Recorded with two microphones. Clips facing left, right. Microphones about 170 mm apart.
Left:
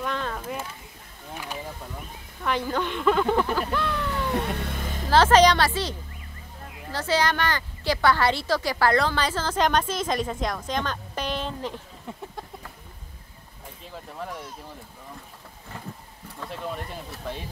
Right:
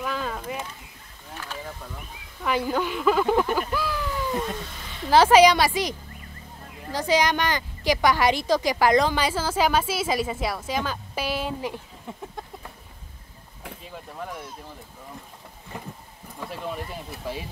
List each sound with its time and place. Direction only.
0.0 s a sound: 5° right (ahead or behind)
2.4 s a woman's voice: 10° right (ahead or behind)
4.1 s music: 65° left (ahead or behind); by 5.0 s 50° left (ahead or behind)
5.1 s a woman's voice: 10° right (ahead or behind)
14.1 s speech: centre (ahead or behind)
15.7 s a sound: 15° right (ahead or behind)
16.4 s speech: 5° right (ahead or behind)